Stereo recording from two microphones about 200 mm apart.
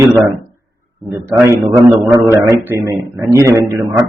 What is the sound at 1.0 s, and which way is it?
Speech, 15° right (ahead or behind).